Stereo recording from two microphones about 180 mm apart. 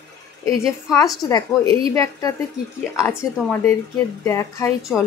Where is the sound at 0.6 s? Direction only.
20° left (ahead or behind).